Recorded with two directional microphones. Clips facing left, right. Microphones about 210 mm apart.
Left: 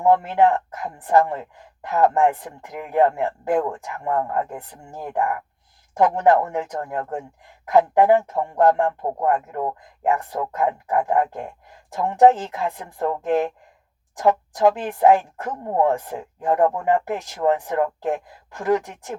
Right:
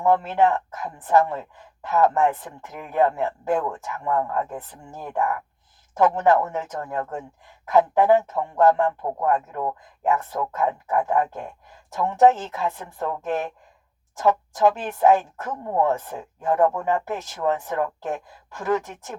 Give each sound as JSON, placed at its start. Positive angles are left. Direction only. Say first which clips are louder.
{"t": 0.3, "sound": "a woman's voice", "louder": "left 2 dB", "side_deg": 15}